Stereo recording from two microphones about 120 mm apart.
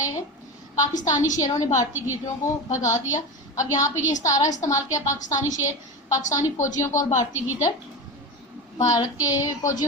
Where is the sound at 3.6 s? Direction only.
25° left (ahead or behind).